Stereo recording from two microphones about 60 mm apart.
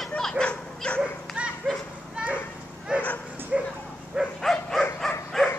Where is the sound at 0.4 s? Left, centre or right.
Centre.